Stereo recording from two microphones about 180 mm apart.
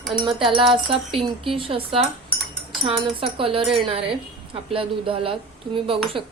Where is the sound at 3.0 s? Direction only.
30° right (ahead or behind).